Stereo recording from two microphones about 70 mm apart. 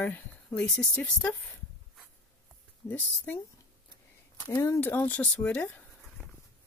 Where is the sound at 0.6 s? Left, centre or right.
Centre.